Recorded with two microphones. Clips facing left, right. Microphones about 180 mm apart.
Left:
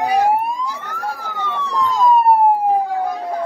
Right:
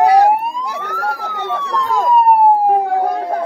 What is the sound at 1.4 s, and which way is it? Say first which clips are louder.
Emergency vehicle: right 1 dB; 65° right (ahead or behind).